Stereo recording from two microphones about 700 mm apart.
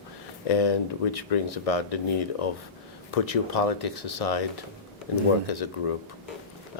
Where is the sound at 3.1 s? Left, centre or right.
Left.